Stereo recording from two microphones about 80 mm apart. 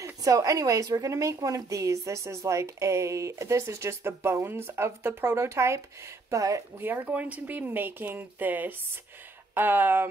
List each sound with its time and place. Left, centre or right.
0.0 s a woman's voice: right
6.8 s speech: right